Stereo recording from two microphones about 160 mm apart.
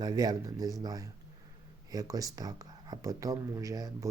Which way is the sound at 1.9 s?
20° right (ahead or behind).